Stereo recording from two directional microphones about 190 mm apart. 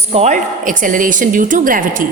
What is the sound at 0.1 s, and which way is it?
A woman's voice, 35° right (ahead or behind).